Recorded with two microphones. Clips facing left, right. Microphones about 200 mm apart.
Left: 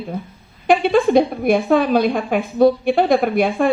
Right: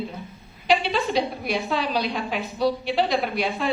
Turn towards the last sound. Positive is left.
turn(degrees=50)  # may be behind; listen again after turning